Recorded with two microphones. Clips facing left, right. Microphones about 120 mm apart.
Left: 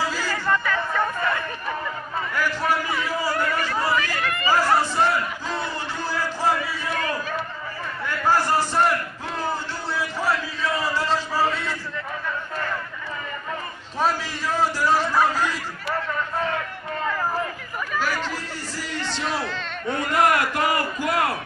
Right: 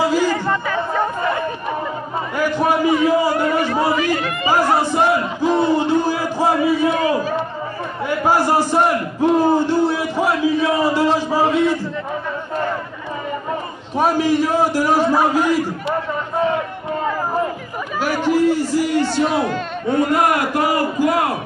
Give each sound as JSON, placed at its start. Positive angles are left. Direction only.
{"t": 0.0, "sound": "chatter", "side_deg": -20}
{"t": 2.3, "sound": "a sound", "side_deg": -20}
{"t": 8.1, "sound": "crowd", "side_deg": -15}
{"t": 13.9, "sound": "a man's voice", "side_deg": -15}
{"t": 17.9, "sound": "a sound", "side_deg": -15}
{"t": 18.9, "sound": "speech", "side_deg": -50}
{"t": 19.9, "sound": "a man's voice", "side_deg": -20}